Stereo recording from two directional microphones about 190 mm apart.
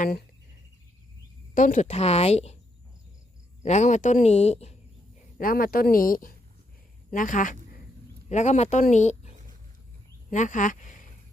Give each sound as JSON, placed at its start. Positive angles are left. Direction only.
{"t": 0.0, "sound": "speech", "side_deg": 50}
{"t": 1.5, "sound": "speech", "side_deg": 40}
{"t": 3.6, "sound": "speech", "side_deg": 40}
{"t": 5.4, "sound": "a woman's voice", "side_deg": 50}